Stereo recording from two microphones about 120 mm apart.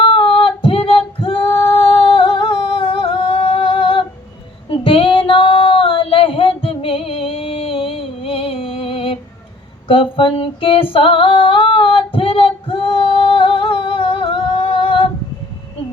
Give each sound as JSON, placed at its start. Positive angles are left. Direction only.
{"t": 0.0, "sound": "female singing", "side_deg": 45}